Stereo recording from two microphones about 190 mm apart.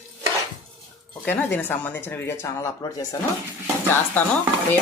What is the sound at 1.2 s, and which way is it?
Speech, 10° left (ahead or behind).